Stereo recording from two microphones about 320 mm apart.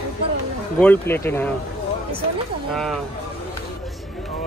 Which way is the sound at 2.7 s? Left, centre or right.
Centre.